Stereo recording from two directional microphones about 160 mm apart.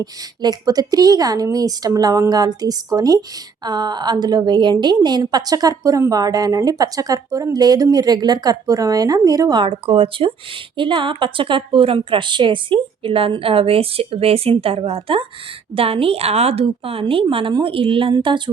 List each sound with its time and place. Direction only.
0.0 s a woman's voice: 25° right (ahead or behind)